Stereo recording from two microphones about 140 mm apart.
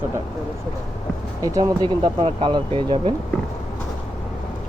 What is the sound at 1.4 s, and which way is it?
Speech, 30° right (ahead or behind).